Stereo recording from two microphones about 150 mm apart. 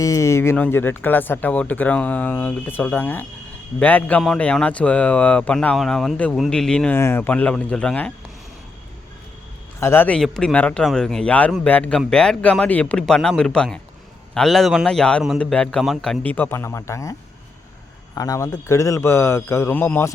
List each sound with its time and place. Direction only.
0.0 s speech: 20° left (ahead or behind)
9.8 s speech: 15° left (ahead or behind)
10.2 s speech: 5° left (ahead or behind)